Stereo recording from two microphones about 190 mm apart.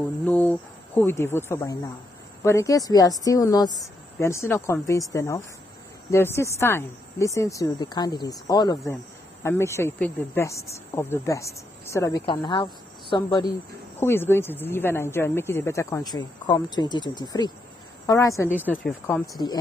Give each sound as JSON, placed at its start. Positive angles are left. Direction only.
{"t": 0.2, "sound": "a woman's voice", "side_deg": 10}
{"t": 12.4, "sound": "speech", "side_deg": 25}
{"t": 13.9, "sound": "a woman's voice", "side_deg": 10}